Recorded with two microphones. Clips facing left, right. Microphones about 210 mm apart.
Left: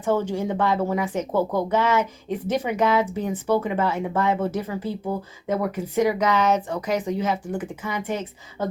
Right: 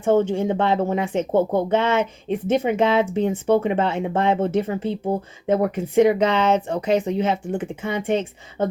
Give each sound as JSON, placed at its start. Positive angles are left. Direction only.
{"t": 0.0, "sound": "speech", "side_deg": -25}